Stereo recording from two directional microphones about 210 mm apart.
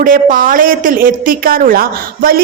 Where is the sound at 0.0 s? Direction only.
40° right (ahead or behind).